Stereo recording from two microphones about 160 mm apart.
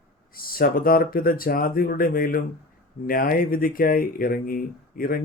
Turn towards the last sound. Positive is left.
turn(degrees=65)  # may be behind; listen again after turning